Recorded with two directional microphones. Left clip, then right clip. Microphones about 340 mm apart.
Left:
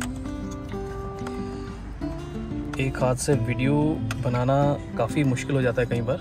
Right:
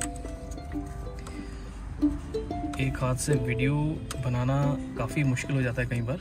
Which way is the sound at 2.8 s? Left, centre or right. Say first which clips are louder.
Left 10 dB; centre.